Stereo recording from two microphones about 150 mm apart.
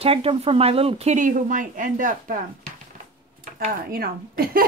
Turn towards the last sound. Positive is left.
turn(degrees=-80)